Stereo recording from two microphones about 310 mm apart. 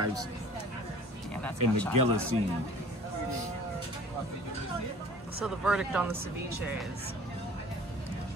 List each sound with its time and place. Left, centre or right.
0.0 s speech: right
1.3 s speech: centre
2.0 s speech: right
5.4 s speech: centre